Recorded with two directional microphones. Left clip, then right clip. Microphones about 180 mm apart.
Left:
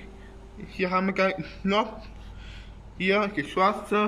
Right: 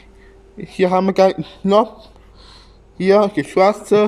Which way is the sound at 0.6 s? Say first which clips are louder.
Right 10 dB; 40° right (ahead or behind).